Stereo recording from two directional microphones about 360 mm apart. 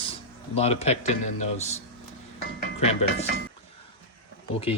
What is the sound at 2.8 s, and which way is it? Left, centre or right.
Speech, centre.